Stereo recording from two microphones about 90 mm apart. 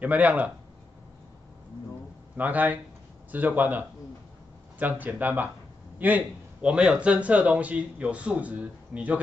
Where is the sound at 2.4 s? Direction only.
20° right (ahead or behind).